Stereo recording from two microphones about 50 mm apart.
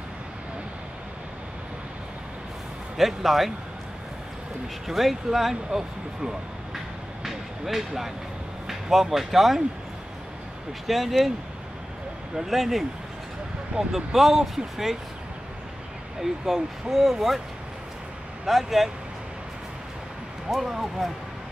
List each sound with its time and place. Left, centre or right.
3.0 s speech: centre
4.8 s speech: centre
7.2 s a sound: centre
8.8 s speech: centre
10.9 s speech: centre
12.4 s speech: centre
16.2 s speech: centre
18.4 s speech: centre
20.5 s speech: centre